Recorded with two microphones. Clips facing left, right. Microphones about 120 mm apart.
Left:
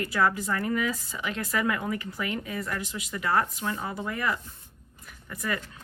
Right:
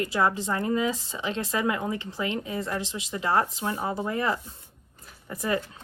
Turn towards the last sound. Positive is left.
turn(degrees=-30)  # may be behind; listen again after turning